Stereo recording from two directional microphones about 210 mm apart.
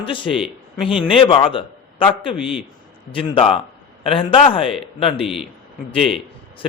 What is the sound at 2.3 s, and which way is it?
Speech, 5° right (ahead or behind).